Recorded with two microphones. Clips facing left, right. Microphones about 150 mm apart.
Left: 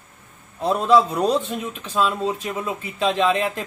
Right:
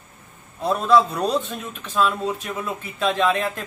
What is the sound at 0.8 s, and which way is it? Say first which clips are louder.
A man's voice: left 1 dB; 25° left (ahead or behind).